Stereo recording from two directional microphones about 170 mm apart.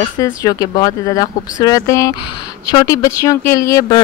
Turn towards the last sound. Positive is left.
turn(degrees=20)  # may be behind; listen again after turning